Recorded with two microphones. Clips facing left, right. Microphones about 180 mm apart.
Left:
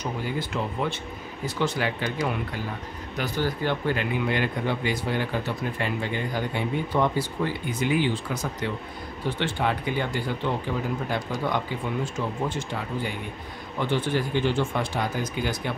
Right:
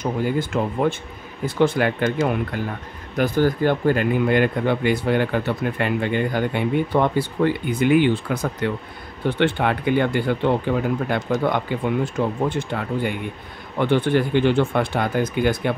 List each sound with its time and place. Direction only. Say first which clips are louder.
0.0 s speech: right 7 dB; 50° right (ahead or behind)